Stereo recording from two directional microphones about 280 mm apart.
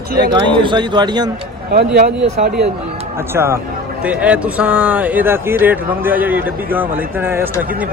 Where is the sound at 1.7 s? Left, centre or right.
Right.